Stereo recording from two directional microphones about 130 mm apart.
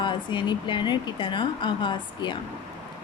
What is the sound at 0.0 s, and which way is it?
A woman's voice, 40° left (ahead or behind).